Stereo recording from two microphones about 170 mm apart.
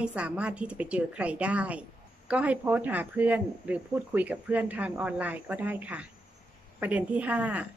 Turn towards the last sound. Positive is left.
turn(degrees=-10)  # may be behind; listen again after turning